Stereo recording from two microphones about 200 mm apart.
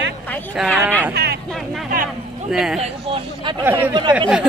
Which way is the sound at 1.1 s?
55° right (ahead or behind).